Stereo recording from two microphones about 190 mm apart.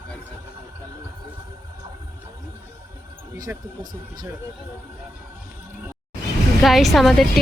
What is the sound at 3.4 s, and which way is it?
Speech, 20° right (ahead or behind).